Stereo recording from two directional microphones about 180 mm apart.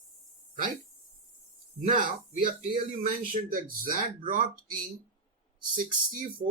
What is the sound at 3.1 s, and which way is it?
Speech, 50° right (ahead or behind).